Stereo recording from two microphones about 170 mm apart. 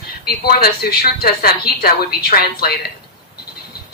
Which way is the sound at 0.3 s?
65° left (ahead or behind).